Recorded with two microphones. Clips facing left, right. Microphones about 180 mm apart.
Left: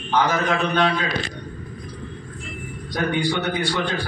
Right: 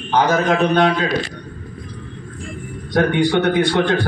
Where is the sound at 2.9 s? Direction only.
65° right (ahead or behind).